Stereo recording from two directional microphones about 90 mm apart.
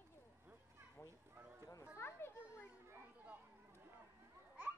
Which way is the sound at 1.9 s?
25° left (ahead or behind).